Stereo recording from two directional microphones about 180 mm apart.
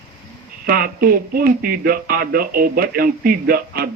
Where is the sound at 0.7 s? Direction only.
55° right (ahead or behind).